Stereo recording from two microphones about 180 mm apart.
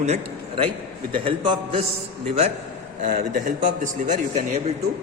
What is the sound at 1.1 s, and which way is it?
Speech, 30° right (ahead or behind).